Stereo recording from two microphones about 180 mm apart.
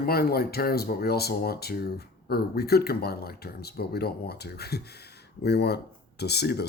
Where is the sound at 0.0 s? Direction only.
60° left (ahead or behind).